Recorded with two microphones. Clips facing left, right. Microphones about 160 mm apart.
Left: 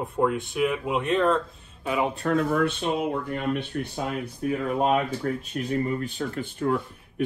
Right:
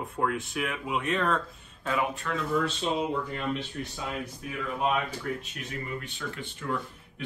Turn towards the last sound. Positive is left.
turn(degrees=45)  # may be behind; listen again after turning